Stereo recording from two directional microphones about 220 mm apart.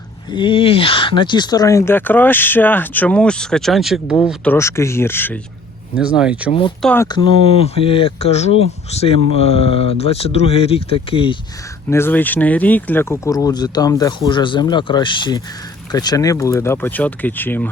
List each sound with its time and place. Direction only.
0.3 s speech: 20° left (ahead or behind); by 4.2 s 5° right (ahead or behind)
4.5 s speech: 10° left (ahead or behind)
6.0 s speech: 5° right (ahead or behind)
6.5 s speech: 25° left (ahead or behind)
6.8 s speech: 10° left (ahead or behind)
7.2 s speech: 25° left (ahead or behind)
11.9 s speech: 10° left (ahead or behind)